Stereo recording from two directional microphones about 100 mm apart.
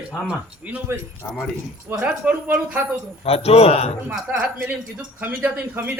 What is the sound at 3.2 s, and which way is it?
Speech, 85° left.